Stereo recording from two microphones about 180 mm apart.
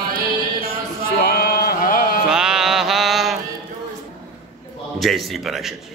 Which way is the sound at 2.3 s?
5° right (ahead or behind).